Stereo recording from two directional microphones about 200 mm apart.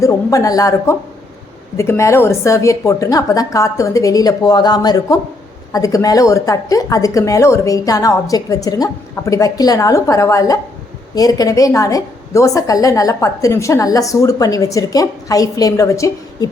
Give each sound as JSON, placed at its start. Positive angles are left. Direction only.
{"t": 0.0, "sound": "a woman's voice", "side_deg": 15}